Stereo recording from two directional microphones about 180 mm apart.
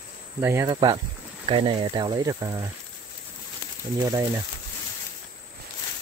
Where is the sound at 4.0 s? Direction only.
20° right (ahead or behind).